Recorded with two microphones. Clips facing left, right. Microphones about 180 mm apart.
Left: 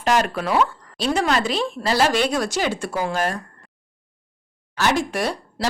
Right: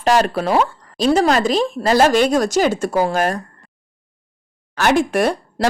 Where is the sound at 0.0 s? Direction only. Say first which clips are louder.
Right 4 dB; 35° right (ahead or behind).